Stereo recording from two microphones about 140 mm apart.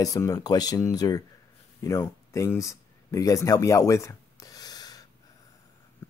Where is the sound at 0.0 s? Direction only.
25° left (ahead or behind).